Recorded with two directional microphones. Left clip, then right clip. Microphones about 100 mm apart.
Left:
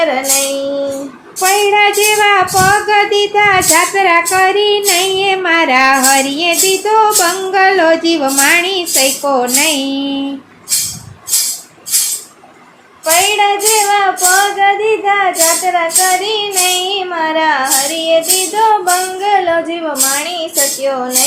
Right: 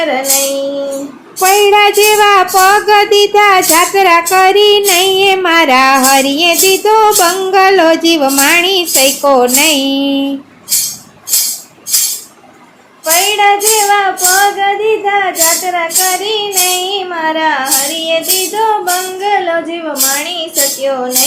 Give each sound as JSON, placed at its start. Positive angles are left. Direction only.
{"t": 0.0, "sound": "child singing", "side_deg": -35}
{"t": 1.4, "sound": "child singing", "side_deg": -50}
{"t": 13.1, "sound": "child singing", "side_deg": -30}
{"t": 17.1, "sound": "music", "side_deg": -25}
{"t": 20.8, "sound": "music", "side_deg": -30}